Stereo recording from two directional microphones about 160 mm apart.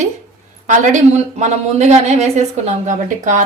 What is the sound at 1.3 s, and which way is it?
A woman's voice, 45° right (ahead or behind).